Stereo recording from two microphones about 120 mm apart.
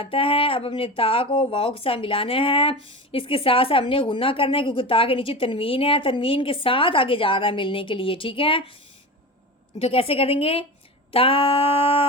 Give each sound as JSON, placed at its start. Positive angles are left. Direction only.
{"t": 0.0, "sound": "speech", "side_deg": 50}
{"t": 9.7, "sound": "speech", "side_deg": 50}